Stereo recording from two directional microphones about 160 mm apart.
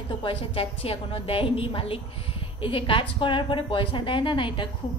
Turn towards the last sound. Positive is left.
turn(degrees=30)  # may be behind; listen again after turning